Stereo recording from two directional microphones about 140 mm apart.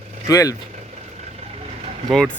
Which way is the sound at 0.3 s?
25° left (ahead or behind).